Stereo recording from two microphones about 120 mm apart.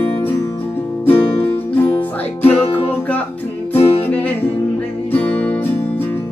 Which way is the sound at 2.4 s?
55° left (ahead or behind).